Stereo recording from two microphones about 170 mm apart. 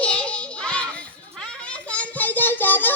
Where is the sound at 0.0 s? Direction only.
5° left (ahead or behind).